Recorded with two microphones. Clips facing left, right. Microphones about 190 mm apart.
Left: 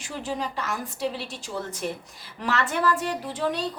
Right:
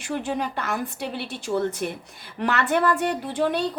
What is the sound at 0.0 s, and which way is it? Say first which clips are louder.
A woman's voice: right 4 dB; 60° right (ahead or behind).